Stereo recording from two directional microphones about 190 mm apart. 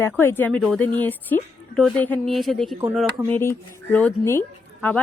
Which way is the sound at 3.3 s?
15° left (ahead or behind).